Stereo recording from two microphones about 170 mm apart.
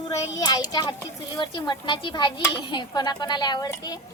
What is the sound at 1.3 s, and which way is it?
A woman's voice, 25° left (ahead or behind).